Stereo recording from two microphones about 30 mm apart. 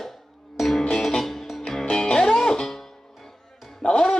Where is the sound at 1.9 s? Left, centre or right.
Left.